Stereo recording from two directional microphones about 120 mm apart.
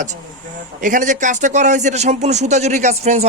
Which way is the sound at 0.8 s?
90° right.